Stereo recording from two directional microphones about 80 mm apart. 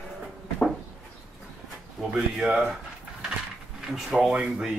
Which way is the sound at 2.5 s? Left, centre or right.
Centre.